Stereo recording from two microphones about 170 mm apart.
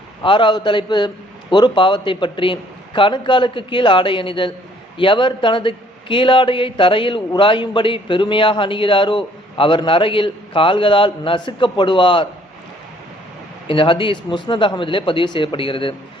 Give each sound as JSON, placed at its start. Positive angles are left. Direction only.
{"t": 0.2, "sound": "a man's voice", "side_deg": 30}
{"t": 13.7, "sound": "a man's voice", "side_deg": 30}